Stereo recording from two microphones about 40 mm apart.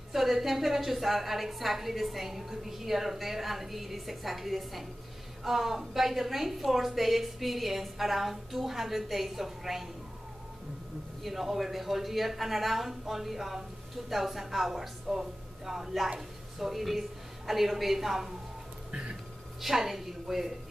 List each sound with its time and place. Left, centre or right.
0.1 s a woman's voice: centre
11.2 s a woman's voice: centre
18.9 s speech: right
19.6 s a woman's voice: centre